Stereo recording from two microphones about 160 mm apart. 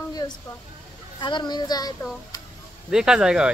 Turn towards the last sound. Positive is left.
turn(degrees=-5)  # may be behind; listen again after turning